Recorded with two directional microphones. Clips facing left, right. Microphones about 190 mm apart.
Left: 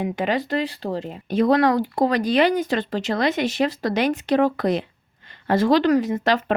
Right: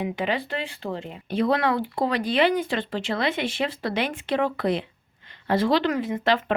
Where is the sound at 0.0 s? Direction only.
45° left (ahead or behind).